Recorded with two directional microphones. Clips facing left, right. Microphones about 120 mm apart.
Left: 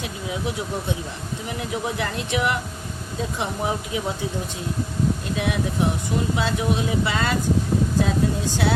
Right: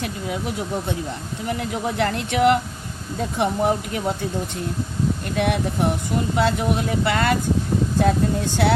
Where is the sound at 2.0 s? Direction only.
55° right (ahead or behind).